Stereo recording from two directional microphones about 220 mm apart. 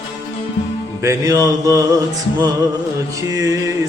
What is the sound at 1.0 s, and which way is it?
Music, 15° right (ahead or behind).